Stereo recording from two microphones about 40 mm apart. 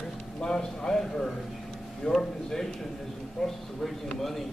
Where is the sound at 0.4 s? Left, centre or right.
Centre.